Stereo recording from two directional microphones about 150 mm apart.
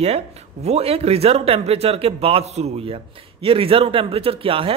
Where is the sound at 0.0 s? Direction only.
45° right (ahead or behind).